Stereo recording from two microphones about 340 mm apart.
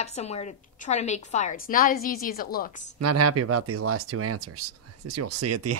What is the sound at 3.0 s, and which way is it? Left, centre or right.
Speech, right.